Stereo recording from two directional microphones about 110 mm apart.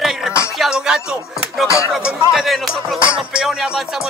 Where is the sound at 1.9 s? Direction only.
5° right (ahead or behind).